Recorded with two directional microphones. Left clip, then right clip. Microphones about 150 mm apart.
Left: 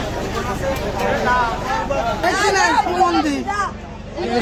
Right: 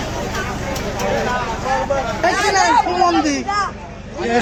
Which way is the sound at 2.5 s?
25° right (ahead or behind).